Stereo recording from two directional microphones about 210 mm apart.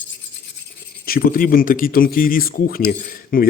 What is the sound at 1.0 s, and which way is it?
Speech, 45° left (ahead or behind).